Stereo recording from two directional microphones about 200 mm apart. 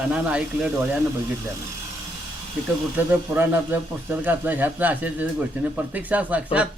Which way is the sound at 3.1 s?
10° right (ahead or behind).